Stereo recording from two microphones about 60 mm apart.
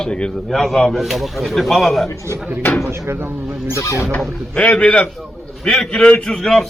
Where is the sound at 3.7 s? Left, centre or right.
Left.